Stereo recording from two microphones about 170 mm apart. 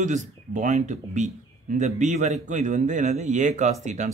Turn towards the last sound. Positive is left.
turn(degrees=-45)  # may be behind; listen again after turning